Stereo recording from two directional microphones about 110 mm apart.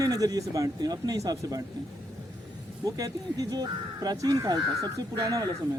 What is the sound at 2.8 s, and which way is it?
Speech, 35° right (ahead or behind).